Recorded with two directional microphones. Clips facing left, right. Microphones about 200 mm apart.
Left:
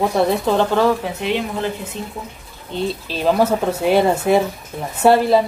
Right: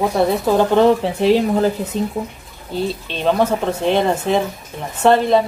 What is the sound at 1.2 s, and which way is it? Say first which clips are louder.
Speech: right 7 dB; 35° right (ahead or behind).